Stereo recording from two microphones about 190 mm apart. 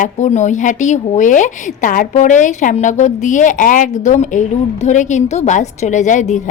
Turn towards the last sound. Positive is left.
turn(degrees=40)  # may be behind; listen again after turning